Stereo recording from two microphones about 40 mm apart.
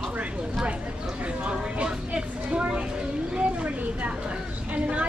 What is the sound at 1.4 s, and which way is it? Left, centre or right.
A woman's voice, right.